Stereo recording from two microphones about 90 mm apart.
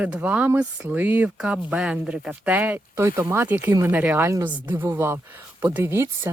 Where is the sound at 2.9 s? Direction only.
30° right (ahead or behind).